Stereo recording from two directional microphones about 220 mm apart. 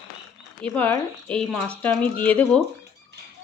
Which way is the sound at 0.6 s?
5° left (ahead or behind).